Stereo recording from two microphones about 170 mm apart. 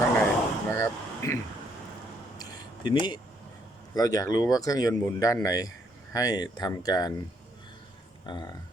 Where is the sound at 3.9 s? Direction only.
20° left (ahead or behind).